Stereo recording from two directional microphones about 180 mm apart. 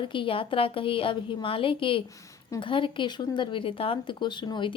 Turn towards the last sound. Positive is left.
turn(degrees=25)  # may be behind; listen again after turning